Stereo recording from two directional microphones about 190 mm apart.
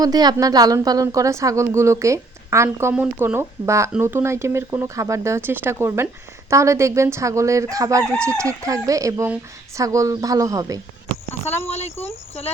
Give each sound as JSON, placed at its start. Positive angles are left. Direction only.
{"t": 0.0, "sound": "speech", "side_deg": -20}
{"t": 11.7, "sound": "speech", "side_deg": 35}